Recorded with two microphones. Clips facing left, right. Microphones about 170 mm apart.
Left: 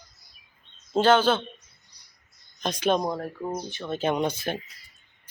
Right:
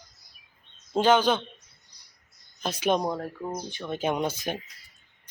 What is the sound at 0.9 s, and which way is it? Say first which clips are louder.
Speech: left 1 dB; 10° right (ahead or behind).